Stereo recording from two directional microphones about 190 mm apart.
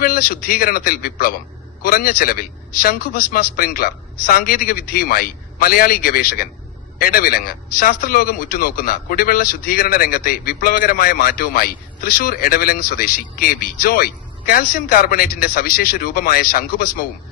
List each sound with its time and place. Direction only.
0.0 s speech: 50° left (ahead or behind)